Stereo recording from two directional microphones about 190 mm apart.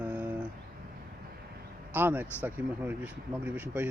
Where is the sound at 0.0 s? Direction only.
10° right (ahead or behind).